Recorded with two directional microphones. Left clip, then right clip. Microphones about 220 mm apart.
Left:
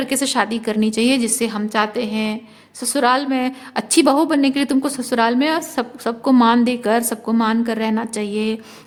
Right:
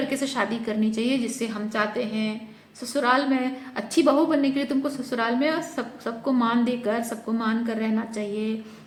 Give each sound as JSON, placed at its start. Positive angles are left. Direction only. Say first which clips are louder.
{"t": 0.1, "sound": "a woman's voice", "louder": "left 7 dB", "side_deg": 50}